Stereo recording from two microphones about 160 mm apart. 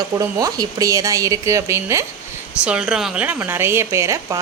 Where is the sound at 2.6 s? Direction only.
5° right (ahead or behind).